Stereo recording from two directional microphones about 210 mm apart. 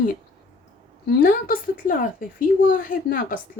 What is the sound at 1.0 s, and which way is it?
A woman's voice, 45° left (ahead or behind).